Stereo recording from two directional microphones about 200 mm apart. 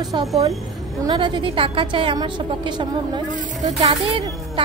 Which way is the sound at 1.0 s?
25° right (ahead or behind).